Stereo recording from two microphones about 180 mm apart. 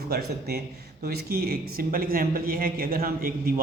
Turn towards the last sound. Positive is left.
turn(degrees=-55)  # may be behind; listen again after turning